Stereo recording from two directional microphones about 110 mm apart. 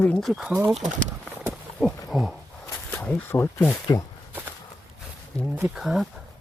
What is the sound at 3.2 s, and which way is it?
Speech, 20° left (ahead or behind).